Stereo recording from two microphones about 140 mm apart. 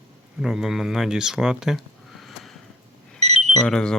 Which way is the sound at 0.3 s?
5° right (ahead or behind).